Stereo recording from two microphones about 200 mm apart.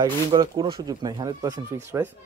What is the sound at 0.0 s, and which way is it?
A man's voice, 20° right (ahead or behind).